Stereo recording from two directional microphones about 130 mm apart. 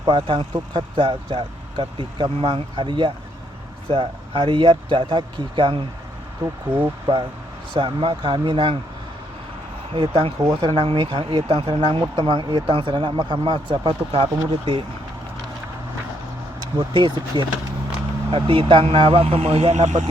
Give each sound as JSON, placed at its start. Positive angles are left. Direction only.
{"t": 0.1, "sound": "speech", "side_deg": -40}
{"t": 7.1, "sound": "speech", "side_deg": -25}
{"t": 7.7, "sound": "speech", "side_deg": -40}
{"t": 9.9, "sound": "speech", "side_deg": -35}
{"t": 16.7, "sound": "speech", "side_deg": -35}